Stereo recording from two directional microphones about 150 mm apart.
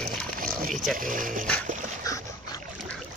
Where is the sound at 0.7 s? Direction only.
Centre (ahead or behind).